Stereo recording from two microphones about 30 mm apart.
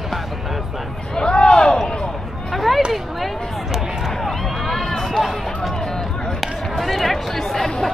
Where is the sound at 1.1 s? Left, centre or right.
Left.